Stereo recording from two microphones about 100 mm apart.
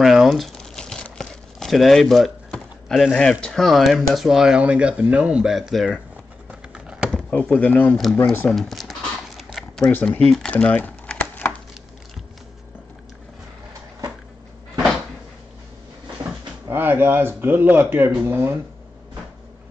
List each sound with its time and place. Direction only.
0.0 s speech: centre (ahead or behind)
6.7 s a sound: 10° right (ahead or behind)
7.1 s a sound: 5° left (ahead or behind)
7.3 s speech: 15° left (ahead or behind)
9.4 s zipper: centre (ahead or behind)
10.3 s typing: 10° left (ahead or behind)
16.6 s speech: 20° right (ahead or behind)